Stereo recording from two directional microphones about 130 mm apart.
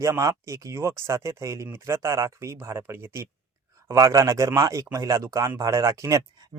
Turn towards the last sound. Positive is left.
turn(degrees=-25)  # may be behind; listen again after turning